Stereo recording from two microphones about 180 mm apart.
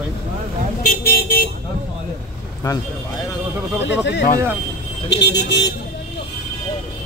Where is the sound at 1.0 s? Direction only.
55° left (ahead or behind).